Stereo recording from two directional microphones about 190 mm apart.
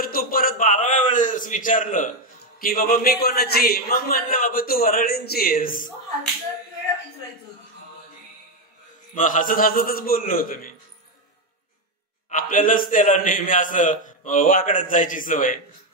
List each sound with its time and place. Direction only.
0.0 s a sound: 50° left (ahead or behind)
2.6 s a man's voice: 50° left (ahead or behind)
9.1 s a man's voice: 45° left (ahead or behind)
12.3 s a man's voice: 45° left (ahead or behind)